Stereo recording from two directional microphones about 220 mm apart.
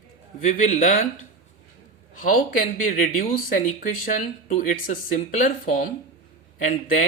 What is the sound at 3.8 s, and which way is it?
Speech, 40° left (ahead or behind).